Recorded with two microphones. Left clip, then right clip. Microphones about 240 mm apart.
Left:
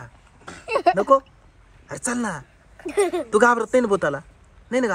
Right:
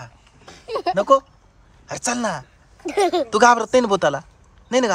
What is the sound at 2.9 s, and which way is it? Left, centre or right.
Speech, right.